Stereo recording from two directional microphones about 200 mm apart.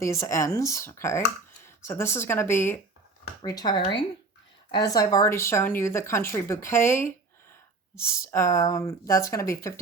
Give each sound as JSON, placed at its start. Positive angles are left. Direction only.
{"t": 0.0, "sound": "speech", "side_deg": 15}